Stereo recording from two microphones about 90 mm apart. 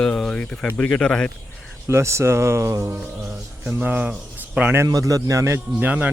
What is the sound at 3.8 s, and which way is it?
Speech, 15° right (ahead or behind).